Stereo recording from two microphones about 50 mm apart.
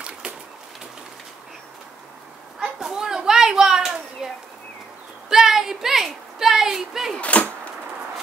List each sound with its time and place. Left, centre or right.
2.8 s a sound: centre
5.3 s speech: centre
7.2 s arrow: left